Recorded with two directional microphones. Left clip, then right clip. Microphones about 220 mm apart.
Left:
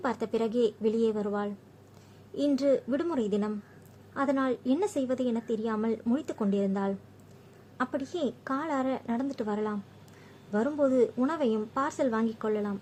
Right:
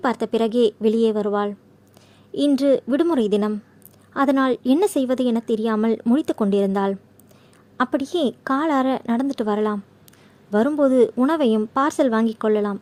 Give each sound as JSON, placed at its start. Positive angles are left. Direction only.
{"t": 0.0, "sound": "a woman's voice", "side_deg": -40}